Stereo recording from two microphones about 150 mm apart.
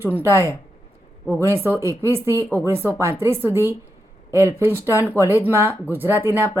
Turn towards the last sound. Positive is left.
turn(degrees=-15)  # may be behind; listen again after turning